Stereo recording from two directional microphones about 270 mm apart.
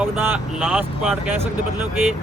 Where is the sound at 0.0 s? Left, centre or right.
Centre.